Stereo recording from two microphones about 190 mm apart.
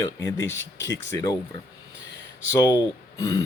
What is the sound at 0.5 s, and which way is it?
Speech, 70° left (ahead or behind).